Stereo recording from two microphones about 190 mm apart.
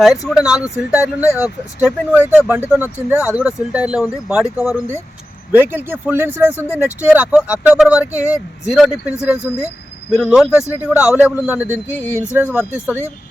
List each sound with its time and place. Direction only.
0.0 s speech: centre (ahead or behind)
11.9 s speech: 10° left (ahead or behind)
12.5 s speech: 10° right (ahead or behind)